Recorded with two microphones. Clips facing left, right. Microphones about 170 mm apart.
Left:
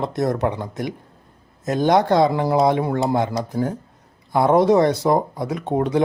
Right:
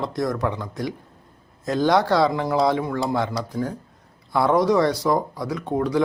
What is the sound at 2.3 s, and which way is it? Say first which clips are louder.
Speech: left 3 dB; 30° left (ahead or behind).